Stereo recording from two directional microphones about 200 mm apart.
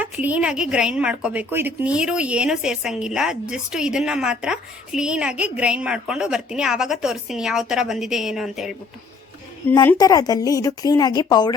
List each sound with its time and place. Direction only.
0.0 s a woman's voice: 10° right (ahead or behind)
9.7 s a woman's voice: 15° left (ahead or behind)